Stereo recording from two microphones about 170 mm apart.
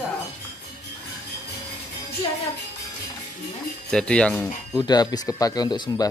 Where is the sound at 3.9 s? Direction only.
5° left (ahead or behind).